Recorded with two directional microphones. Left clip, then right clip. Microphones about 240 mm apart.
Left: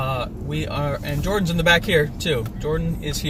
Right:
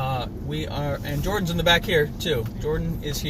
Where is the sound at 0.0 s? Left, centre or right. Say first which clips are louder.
Left 3 dB; centre.